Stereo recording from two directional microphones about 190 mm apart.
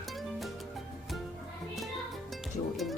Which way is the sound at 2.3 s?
Centre (ahead or behind).